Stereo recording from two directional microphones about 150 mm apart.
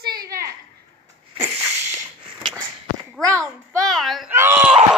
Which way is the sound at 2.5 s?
20° right (ahead or behind).